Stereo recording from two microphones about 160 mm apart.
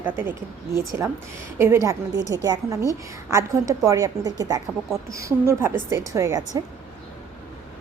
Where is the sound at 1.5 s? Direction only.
15° right (ahead or behind).